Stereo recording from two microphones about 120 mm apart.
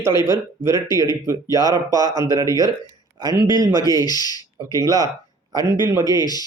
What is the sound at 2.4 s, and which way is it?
Speech, 30° left (ahead or behind).